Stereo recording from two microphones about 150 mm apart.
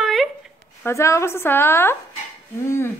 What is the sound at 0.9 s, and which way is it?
A woman's voice, 20° left (ahead or behind).